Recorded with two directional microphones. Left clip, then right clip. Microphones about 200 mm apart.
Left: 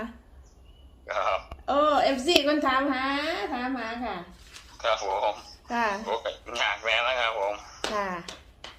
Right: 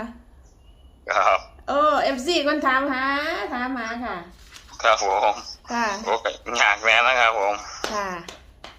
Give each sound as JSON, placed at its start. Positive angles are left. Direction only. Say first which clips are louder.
{"t": 1.0, "sound": "a sound", "louder": "right 8 dB", "side_deg": -55}
{"t": 1.6, "sound": "a woman's voice", "louder": "right 2 dB", "side_deg": -15}
{"t": 4.8, "sound": "speech", "louder": "right 7 dB", "side_deg": -55}
{"t": 5.7, "sound": "a woman's voice", "louder": "right 3 dB", "side_deg": -10}
{"t": 6.0, "sound": "speech", "louder": "right 6 dB", "side_deg": -55}
{"t": 7.8, "sound": "speech", "louder": "right 3 dB", "side_deg": -10}